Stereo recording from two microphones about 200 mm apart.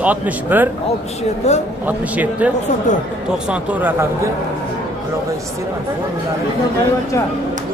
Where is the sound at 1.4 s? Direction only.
35° left (ahead or behind).